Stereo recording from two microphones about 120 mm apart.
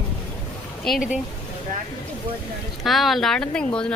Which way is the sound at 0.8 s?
Centre (ahead or behind).